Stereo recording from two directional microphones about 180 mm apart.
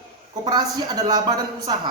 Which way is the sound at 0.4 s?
25° right (ahead or behind).